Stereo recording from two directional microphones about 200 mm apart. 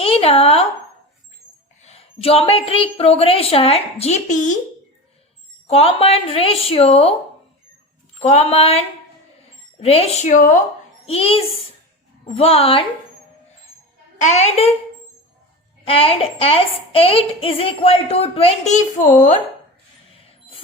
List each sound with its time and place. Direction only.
0.0 s a sound: 30° left (ahead or behind)
1.8 s a woman's voice: 30° left (ahead or behind)
5.6 s a woman's voice: 30° left (ahead or behind)
8.2 s a woman's voice: 30° left (ahead or behind)
9.8 s a woman's voice: 30° left (ahead or behind)
11.0 s a woman's voice: 30° left (ahead or behind)
14.2 s a woman's voice: 35° left (ahead or behind)
15.8 s a woman's voice: 30° left (ahead or behind)